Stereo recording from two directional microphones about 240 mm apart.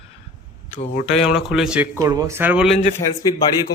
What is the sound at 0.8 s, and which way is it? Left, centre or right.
Speech, left.